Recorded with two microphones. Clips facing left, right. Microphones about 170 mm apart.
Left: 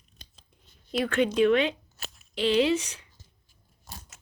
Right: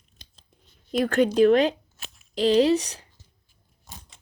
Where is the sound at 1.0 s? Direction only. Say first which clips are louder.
Right 4 dB; 40° right (ahead or behind).